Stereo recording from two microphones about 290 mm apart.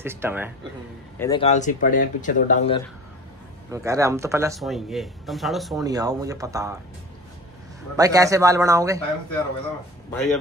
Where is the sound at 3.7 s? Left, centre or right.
Centre.